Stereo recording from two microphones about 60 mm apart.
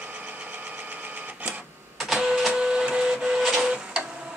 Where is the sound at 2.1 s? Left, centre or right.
Centre.